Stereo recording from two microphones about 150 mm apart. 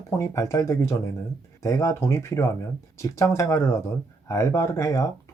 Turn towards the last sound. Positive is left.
turn(degrees=20)  # may be behind; listen again after turning